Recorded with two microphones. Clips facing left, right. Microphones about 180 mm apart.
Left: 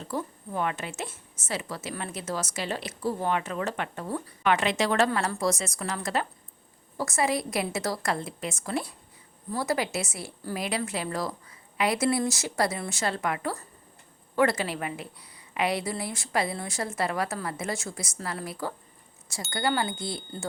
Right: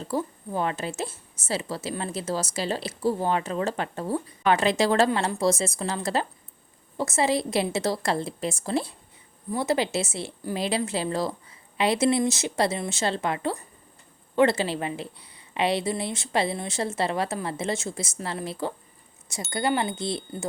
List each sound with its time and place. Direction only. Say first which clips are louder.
0.0 s a woman's voice: right 4 dB; 30° right (ahead or behind)